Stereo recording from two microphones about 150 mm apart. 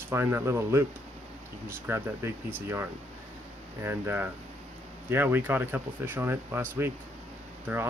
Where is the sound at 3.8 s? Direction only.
15° right (ahead or behind).